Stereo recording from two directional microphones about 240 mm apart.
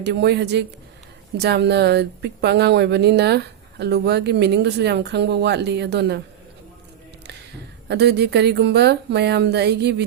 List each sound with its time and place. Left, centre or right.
0.0 s speech: right
7.9 s speech: right